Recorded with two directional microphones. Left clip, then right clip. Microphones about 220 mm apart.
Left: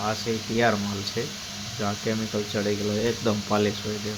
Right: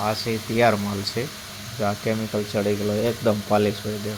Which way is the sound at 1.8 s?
5° right (ahead or behind).